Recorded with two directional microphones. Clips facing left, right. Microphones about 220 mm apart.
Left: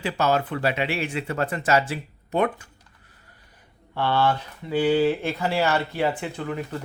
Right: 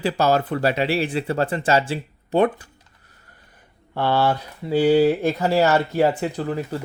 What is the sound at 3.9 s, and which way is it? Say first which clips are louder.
Speech: right 2 dB; 40° right (ahead or behind).